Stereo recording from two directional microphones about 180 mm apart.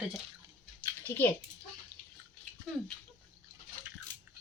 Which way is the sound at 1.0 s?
10° left (ahead or behind).